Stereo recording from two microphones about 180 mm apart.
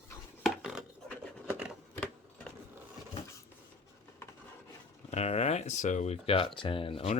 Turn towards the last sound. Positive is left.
turn(degrees=35)  # may be behind; listen again after turning